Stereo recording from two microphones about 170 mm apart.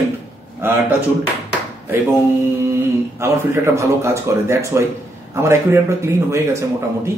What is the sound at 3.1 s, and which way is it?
A man's voice, 15° right (ahead or behind).